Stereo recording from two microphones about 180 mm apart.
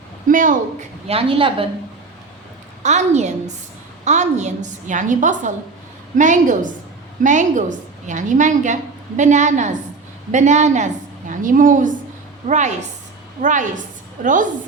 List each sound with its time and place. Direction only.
0.3 s a woman's voice: 45° right (ahead or behind)
1.0 s a woman's voice: 30° right (ahead or behind)
2.8 s a woman's voice: 40° right (ahead or behind)